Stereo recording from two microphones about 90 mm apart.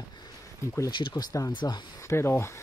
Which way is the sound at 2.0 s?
30° left (ahead or behind).